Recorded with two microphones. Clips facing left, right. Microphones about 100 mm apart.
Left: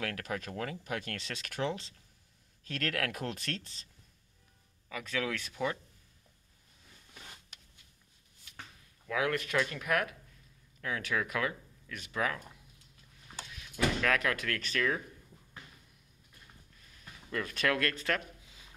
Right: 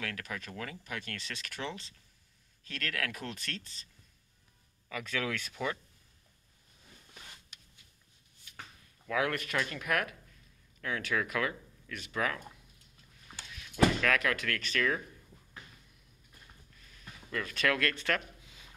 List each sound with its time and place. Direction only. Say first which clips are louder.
0.0 s speech: left 3 dB; 55° left (ahead or behind)
2.6 s speech: left 3 dB; 65° left (ahead or behind); by 3.7 s 80° left
4.8 s speech: even; 20° left (ahead or behind)
9.1 s speech: left 1 dB; 15° left (ahead or behind)
14.0 s speech: even; 25° left (ahead or behind)
14.3 s speech: right 1 dB; 10° left (ahead or behind)
16.8 s a sound: right 2 dB; 15° left (ahead or behind)